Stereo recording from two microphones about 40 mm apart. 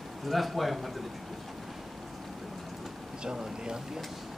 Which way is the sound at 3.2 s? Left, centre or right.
Centre.